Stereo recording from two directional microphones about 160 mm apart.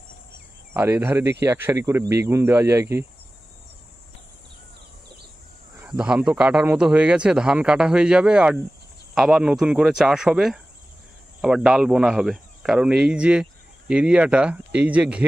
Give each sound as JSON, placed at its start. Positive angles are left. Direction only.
{"t": 0.7, "sound": "speech", "side_deg": -15}
{"t": 5.8, "sound": "a man's voice", "side_deg": -10}